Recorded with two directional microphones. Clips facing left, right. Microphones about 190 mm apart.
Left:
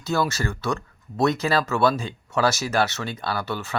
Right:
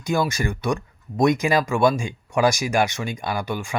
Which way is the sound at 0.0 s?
15° right (ahead or behind).